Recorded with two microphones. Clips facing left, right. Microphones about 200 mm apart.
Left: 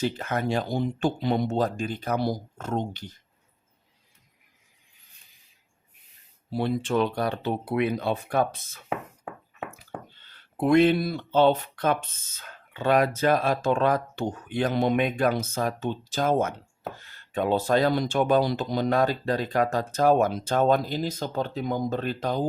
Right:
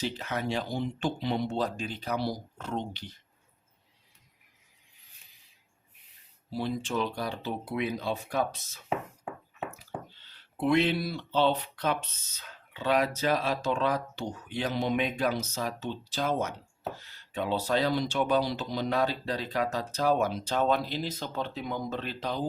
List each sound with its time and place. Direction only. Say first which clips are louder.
0.0 s speech: left 5 dB; 50° left (ahead or behind)
6.5 s speech: left 6 dB; 60° left (ahead or behind)